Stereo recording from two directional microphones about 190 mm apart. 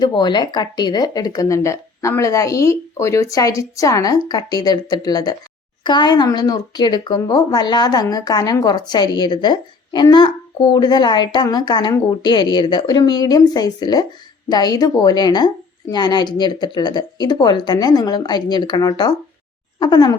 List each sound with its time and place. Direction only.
0.0 s speech: 25° left (ahead or behind)